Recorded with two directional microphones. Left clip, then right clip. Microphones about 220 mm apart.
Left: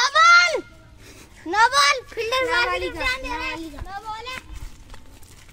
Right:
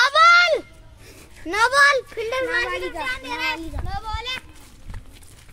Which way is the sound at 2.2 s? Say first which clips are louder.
Left 2 dB; 50° left (ahead or behind).